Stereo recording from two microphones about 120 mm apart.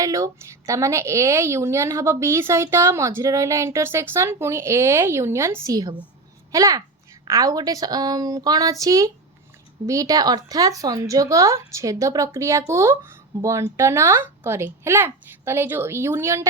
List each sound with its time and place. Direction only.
0.0 s a woman's voice: 25° right (ahead or behind)